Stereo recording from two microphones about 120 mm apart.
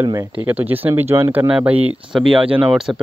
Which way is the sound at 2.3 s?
45° right (ahead or behind).